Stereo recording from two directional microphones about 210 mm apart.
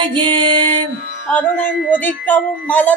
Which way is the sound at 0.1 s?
25° right (ahead or behind).